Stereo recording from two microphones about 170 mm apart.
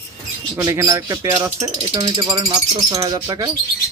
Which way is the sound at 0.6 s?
20° right (ahead or behind).